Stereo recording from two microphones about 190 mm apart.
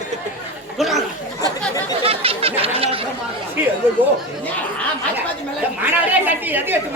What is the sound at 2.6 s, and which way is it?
Speech, 30° right (ahead or behind).